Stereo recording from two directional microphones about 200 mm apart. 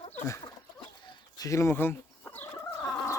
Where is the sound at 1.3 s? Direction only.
15° left (ahead or behind).